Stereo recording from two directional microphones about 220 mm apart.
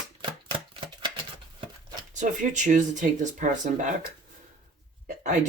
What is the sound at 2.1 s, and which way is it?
Speech, 35° right (ahead or behind).